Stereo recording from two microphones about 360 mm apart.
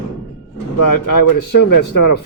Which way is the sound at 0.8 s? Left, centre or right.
Left.